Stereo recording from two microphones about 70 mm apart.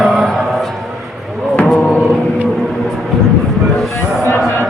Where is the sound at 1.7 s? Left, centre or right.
Centre.